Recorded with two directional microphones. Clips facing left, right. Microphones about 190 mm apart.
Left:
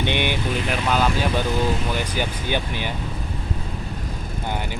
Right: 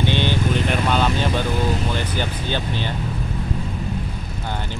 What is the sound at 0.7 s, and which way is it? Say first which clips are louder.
Vehicle: left 2 dB; 5° left (ahead or behind).